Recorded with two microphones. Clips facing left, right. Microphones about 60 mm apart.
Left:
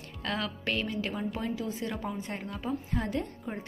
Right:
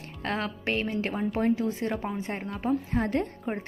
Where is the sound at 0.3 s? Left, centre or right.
Right.